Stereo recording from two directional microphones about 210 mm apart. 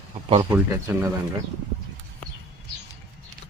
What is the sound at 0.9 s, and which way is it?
Speech, 15° right (ahead or behind).